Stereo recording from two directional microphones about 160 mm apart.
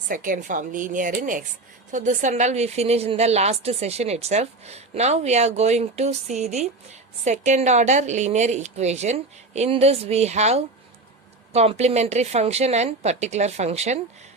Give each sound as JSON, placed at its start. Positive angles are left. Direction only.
{"t": 0.1, "sound": "a woman's voice", "side_deg": -55}